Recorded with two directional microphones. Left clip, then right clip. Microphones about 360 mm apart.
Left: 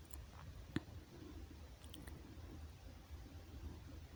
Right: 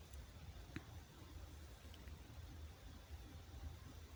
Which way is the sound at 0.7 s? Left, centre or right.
Centre.